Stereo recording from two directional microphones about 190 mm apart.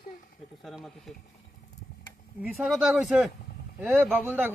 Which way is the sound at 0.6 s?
Centre (ahead or behind).